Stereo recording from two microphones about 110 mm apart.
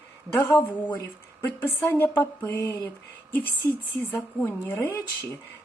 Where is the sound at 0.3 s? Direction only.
20° left (ahead or behind).